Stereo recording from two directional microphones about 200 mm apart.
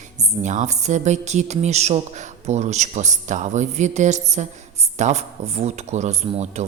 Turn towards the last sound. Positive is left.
turn(degrees=-30)  # may be behind; listen again after turning